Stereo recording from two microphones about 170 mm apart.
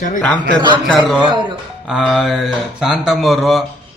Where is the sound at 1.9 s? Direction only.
Centre (ahead or behind).